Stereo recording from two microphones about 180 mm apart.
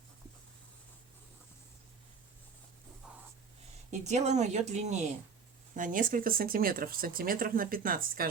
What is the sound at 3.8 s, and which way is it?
Speech, 40° right (ahead or behind).